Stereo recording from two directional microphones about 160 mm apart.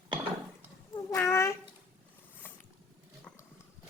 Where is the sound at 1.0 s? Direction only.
15° left (ahead or behind).